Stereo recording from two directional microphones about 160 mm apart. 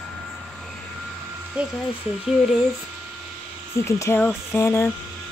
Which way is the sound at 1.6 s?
5° right (ahead or behind).